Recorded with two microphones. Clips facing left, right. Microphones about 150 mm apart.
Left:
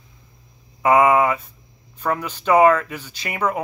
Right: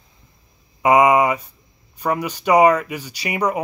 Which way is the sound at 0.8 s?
15° right (ahead or behind).